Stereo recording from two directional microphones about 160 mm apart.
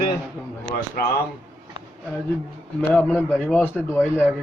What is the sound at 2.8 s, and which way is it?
Speech, 10° left (ahead or behind).